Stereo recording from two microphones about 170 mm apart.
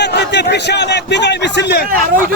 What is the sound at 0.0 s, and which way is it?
A man's voice, 90° left.